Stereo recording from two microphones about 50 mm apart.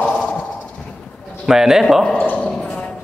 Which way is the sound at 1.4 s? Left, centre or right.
Centre.